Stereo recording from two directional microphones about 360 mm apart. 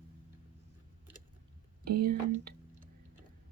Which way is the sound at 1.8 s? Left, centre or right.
Right.